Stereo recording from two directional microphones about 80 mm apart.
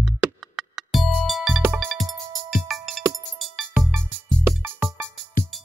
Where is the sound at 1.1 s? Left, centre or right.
Centre.